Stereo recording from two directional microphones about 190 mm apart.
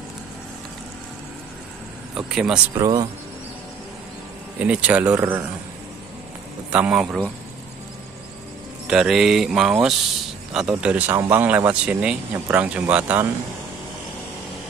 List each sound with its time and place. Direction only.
2.1 s speech: 5° right (ahead or behind)
2.8 s speech: 20° right (ahead or behind)
4.6 s speech: 5° right (ahead or behind)
6.7 s speech: 5° right (ahead or behind)
8.8 s speech: 5° right (ahead or behind)